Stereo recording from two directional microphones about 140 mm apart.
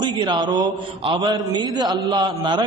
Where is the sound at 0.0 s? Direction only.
30° right (ahead or behind).